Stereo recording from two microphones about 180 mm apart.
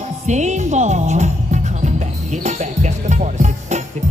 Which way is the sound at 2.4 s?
40° right (ahead or behind).